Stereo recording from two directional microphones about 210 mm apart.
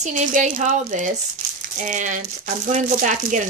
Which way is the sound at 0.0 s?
35° right (ahead or behind).